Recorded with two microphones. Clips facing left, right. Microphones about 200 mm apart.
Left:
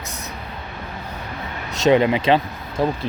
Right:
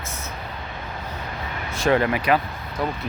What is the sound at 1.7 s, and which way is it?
Speech, 20° left (ahead or behind).